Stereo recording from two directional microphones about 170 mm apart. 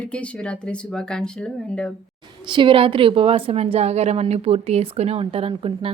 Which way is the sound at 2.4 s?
30° right (ahead or behind).